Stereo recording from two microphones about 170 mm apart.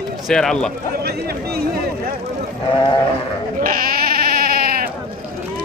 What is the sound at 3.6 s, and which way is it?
Sheep, 60° right (ahead or behind).